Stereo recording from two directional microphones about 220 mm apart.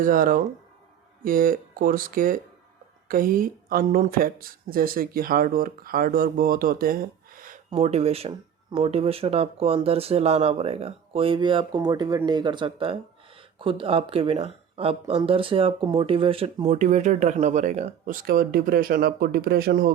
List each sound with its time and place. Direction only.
0.0 s speech: 40° right (ahead or behind)
7.7 s speech: 30° right (ahead or behind)